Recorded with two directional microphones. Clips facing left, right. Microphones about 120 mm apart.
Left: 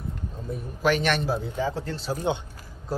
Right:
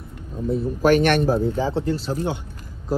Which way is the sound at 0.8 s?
50° right (ahead or behind).